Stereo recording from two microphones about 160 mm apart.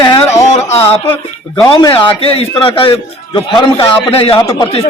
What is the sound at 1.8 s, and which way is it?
A man's voice, 30° left (ahead or behind).